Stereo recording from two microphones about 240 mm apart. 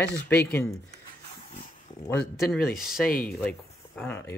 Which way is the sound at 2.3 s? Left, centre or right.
Centre.